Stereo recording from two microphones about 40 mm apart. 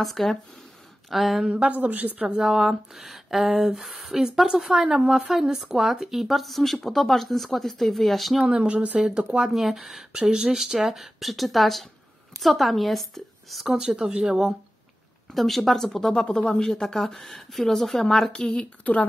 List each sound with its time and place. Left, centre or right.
0.0 s speech: centre
1.5 s a woman's voice: right
2.2 s speech: centre
4.8 s speech: right
5.1 s speech: centre
8.5 s speech: right
9.5 s speech: centre
10.2 s speech: right
10.5 s speech: centre
13.7 s speech: centre
15.3 s speech: centre
18.3 s a woman's voice: centre